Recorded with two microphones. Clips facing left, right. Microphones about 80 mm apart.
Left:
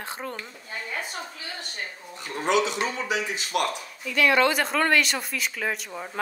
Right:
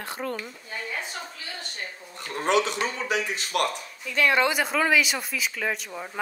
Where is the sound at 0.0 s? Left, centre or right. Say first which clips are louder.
Right 2 dB; left.